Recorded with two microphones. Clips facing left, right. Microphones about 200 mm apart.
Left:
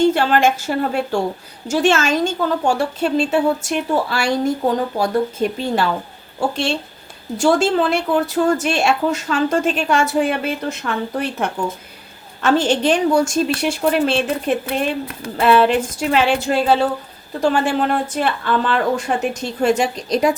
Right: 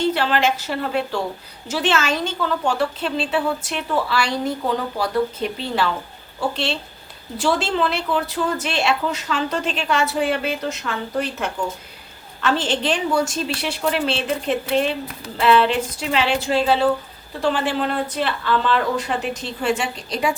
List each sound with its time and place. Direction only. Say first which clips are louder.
0.0 s a woman's voice: left 5 dB; 45° left (ahead or behind)
7.3 s a woman's voice: left 5 dB; 45° left (ahead or behind)